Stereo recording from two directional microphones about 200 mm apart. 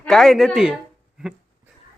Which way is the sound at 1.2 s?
5° right (ahead or behind).